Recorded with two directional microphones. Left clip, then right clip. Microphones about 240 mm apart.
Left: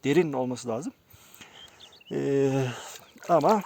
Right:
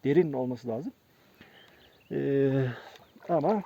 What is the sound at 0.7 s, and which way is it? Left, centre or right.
Speech, centre.